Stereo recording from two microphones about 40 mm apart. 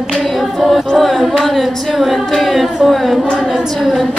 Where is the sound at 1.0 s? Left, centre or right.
Centre.